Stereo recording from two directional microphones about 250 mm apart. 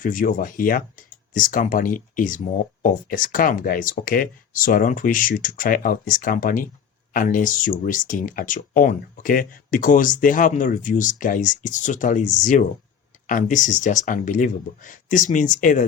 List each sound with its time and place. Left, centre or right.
0.0 s speech: left